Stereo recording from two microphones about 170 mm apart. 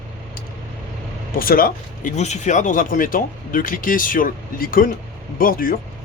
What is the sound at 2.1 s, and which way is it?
Speech, 45° left (ahead or behind).